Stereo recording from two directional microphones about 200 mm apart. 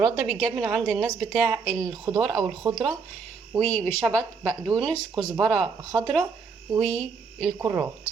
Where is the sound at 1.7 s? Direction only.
20° right (ahead or behind).